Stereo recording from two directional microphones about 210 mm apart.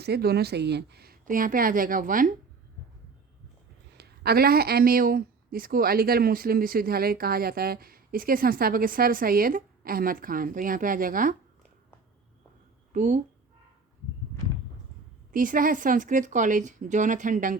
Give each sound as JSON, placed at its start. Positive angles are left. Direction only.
{"t": 0.0, "sound": "speech", "side_deg": -50}
{"t": 3.9, "sound": "speech", "side_deg": -50}
{"t": 12.9, "sound": "speech", "side_deg": -35}
{"t": 15.3, "sound": "a woman's voice", "side_deg": -40}